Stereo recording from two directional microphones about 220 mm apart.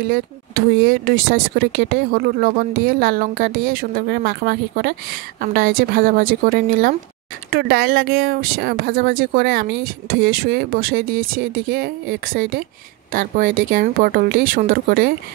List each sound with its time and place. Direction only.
0.1 s speech: 45° right (ahead or behind)